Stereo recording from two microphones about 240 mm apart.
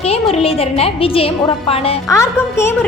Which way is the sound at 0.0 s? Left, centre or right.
Left.